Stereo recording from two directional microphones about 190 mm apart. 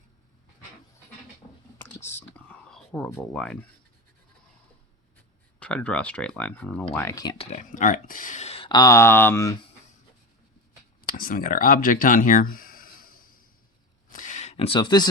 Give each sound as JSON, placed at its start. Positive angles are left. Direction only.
{"t": 1.8, "sound": "whispering", "side_deg": 10}
{"t": 3.3, "sound": "speech", "side_deg": 0}
{"t": 5.5, "sound": "speech", "side_deg": 5}
{"t": 7.3, "sound": "speech", "side_deg": 35}
{"t": 11.1, "sound": "speech", "side_deg": 50}
{"t": 14.1, "sound": "a sound", "side_deg": 40}